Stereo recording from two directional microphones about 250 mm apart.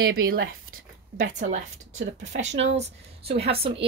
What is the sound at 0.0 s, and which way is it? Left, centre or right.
Speech, right.